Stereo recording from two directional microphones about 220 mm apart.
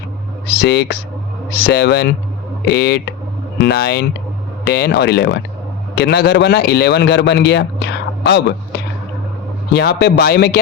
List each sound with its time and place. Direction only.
0.4 s speech: 50° left (ahead or behind)
10.0 s speech: 45° left (ahead or behind)